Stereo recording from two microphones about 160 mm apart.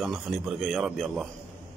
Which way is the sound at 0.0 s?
Centre (ahead or behind).